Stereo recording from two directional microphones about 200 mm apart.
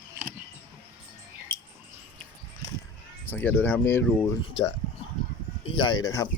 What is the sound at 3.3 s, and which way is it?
Speech, 10° left (ahead or behind).